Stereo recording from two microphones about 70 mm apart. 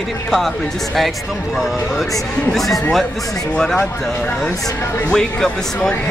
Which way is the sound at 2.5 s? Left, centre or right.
Centre.